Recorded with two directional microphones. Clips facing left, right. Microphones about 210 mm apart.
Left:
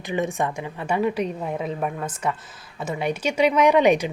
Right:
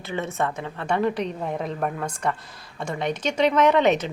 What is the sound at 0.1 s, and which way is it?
Speech, 15° left (ahead or behind).